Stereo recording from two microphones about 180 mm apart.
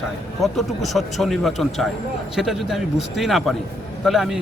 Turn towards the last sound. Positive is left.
turn(degrees=0)  # may be behind; listen again after turning